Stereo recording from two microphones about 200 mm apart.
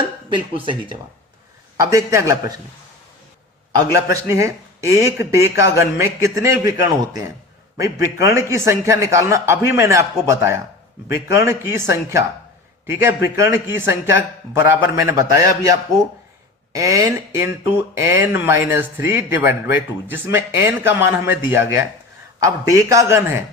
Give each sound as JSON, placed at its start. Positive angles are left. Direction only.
{"t": 0.3, "sound": "speech", "side_deg": -25}
{"t": 4.2, "sound": "speech", "side_deg": -15}